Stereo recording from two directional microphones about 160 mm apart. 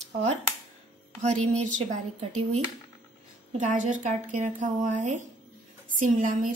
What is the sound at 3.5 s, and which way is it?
A woman's voice, 50° right (ahead or behind).